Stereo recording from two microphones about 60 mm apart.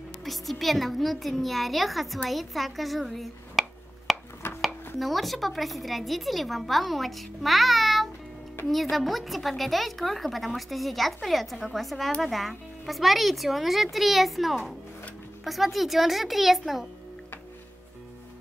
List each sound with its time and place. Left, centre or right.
0.2 s a woman's voice: centre
4.1 s a sound: centre
4.9 s a woman's voice: centre
8.6 s speech: left
8.9 s a woman's voice: centre